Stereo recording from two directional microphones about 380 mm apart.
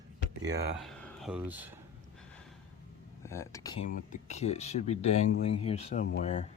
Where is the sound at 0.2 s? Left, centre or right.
Right.